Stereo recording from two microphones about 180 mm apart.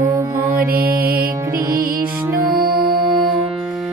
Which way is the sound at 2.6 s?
55° right (ahead or behind).